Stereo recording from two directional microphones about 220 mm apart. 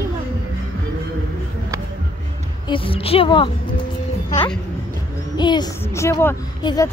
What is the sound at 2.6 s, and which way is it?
Speech, 25° left (ahead or behind).